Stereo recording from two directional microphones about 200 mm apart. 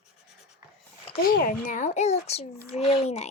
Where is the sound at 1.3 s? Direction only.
45° left (ahead or behind).